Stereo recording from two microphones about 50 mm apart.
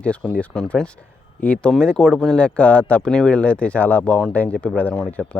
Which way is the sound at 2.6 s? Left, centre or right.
Left.